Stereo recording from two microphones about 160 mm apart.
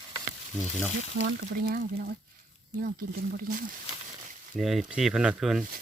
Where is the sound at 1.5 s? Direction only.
65° right (ahead or behind).